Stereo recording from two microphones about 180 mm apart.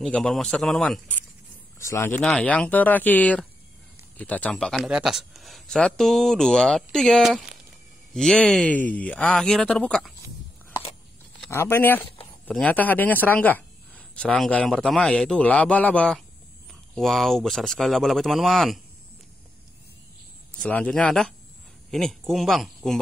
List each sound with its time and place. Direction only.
0.0 s speech: centre (ahead or behind)
1.8 s speech: 15° left (ahead or behind)
10.7 s a sound: 30° left (ahead or behind)
11.5 s speech: 15° left (ahead or behind)
20.6 s speech: 5° left (ahead or behind)